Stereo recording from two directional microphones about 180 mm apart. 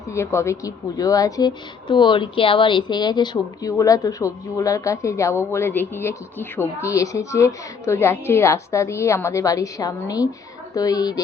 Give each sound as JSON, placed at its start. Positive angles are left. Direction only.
{"t": 0.1, "sound": "a woman's voice", "side_deg": 15}